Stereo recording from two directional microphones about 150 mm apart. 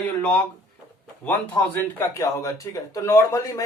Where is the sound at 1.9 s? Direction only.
20° left (ahead or behind).